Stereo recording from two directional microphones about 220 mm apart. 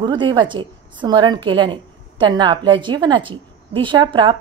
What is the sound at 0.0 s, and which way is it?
A woman's voice, 20° right (ahead or behind).